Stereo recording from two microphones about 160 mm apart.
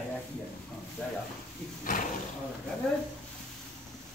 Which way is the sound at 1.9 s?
55° left (ahead or behind).